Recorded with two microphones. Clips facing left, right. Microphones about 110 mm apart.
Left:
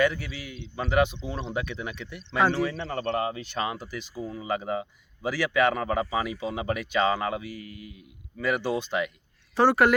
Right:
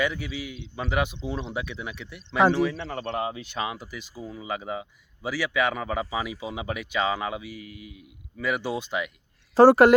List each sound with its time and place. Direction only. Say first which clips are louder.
0.0 s speech: left 2 dB; 5° right (ahead or behind)
9.6 s a woman's voice: right 6 dB; 35° right (ahead or behind)